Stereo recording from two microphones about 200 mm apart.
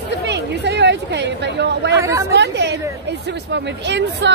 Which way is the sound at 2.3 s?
60° right (ahead or behind).